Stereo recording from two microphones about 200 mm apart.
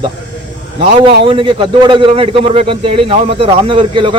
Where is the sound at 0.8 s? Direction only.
25° right (ahead or behind).